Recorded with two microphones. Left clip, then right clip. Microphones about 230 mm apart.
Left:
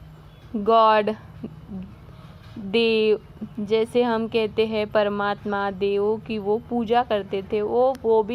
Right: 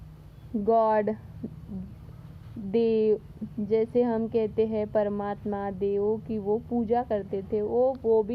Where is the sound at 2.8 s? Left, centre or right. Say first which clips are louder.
Left 4 dB; left.